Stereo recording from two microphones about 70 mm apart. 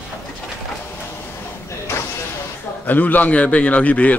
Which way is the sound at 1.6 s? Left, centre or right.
Left.